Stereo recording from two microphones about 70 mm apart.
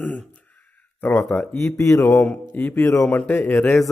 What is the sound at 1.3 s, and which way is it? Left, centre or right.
Speech, centre.